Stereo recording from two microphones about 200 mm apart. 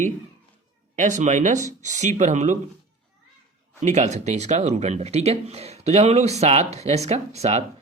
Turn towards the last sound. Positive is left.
turn(degrees=-35)  # may be behind; listen again after turning